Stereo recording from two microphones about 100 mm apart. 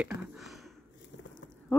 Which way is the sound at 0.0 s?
10° right (ahead or behind).